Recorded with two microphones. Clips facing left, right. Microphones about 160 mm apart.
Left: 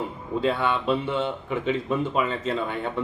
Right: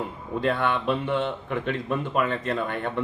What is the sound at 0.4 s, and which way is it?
A man's voice, 5° left (ahead or behind).